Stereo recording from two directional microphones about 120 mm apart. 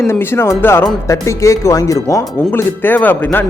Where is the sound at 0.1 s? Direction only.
20° left (ahead or behind).